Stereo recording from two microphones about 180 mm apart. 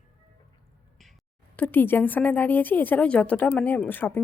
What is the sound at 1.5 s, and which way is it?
A woman's voice, 10° left (ahead or behind).